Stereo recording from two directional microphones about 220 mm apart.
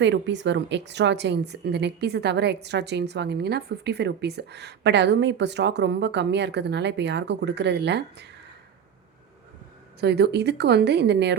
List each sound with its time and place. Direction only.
0.0 s a woman's voice: 55° right (ahead or behind)
10.0 s a woman's voice: 50° right (ahead or behind)